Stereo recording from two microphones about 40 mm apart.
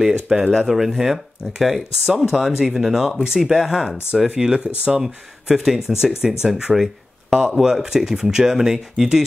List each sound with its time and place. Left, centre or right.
0.0 s speech: centre